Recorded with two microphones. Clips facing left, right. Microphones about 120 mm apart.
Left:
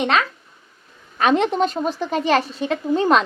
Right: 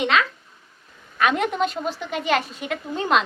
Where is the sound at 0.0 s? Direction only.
40° left (ahead or behind).